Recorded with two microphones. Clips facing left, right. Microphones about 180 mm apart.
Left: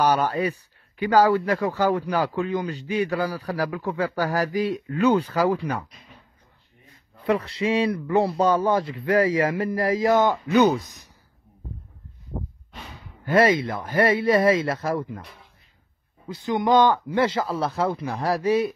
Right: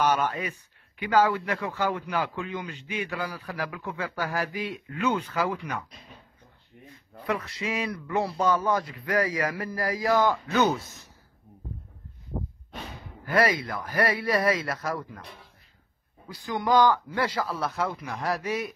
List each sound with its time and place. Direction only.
0.0 s speech: 35° left (ahead or behind)
7.2 s speech: 30° left (ahead or behind)
13.2 s speech: 25° left (ahead or behind)
16.3 s speech: 20° left (ahead or behind)